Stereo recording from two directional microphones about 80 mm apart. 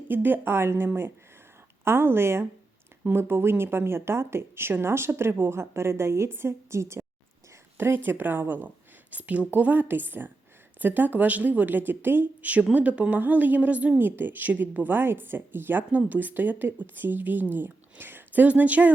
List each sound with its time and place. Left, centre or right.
0.1 s a woman's voice: right